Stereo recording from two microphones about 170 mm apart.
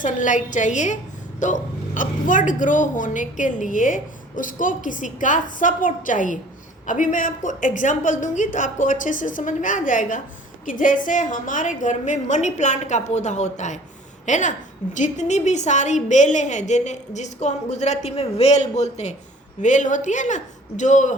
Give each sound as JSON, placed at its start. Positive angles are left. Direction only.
{"t": 0.0, "sound": "speech", "side_deg": 50}